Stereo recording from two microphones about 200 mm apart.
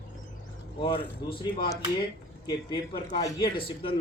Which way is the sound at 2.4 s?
25° left (ahead or behind).